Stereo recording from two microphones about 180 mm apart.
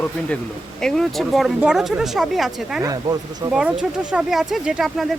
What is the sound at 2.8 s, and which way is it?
Speech, 20° right (ahead or behind).